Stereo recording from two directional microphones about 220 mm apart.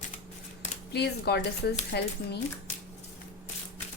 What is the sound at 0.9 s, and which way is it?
A woman's voice, 50° left (ahead or behind).